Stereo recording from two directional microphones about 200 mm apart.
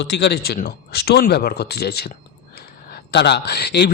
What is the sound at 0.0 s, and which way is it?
Speech, 60° left (ahead or behind).